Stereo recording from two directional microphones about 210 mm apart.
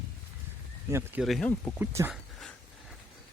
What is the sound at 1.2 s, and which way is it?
Speech, centre (ahead or behind).